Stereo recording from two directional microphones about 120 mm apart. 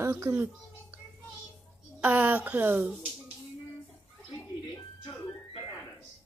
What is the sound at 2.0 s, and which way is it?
Speech, 10° right (ahead or behind).